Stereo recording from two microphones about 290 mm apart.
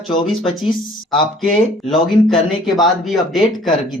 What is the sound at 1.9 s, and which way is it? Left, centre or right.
Speech, centre.